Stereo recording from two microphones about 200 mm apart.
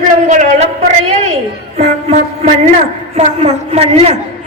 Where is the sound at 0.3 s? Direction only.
35° right (ahead or behind).